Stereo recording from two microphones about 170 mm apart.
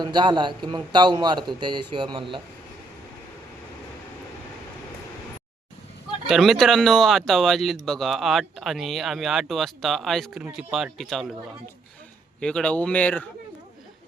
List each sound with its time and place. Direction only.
0.0 s a man's voice: 25° right (ahead or behind)
6.2 s speech: centre (ahead or behind)
12.4 s speech: 5° left (ahead or behind)